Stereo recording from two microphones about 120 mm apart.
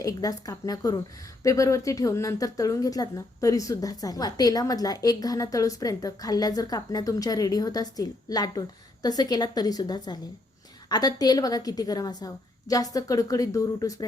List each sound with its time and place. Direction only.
0.0 s a woman's voice: 30° left (ahead or behind)